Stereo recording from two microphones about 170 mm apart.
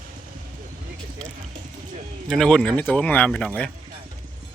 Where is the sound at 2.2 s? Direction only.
5° left (ahead or behind).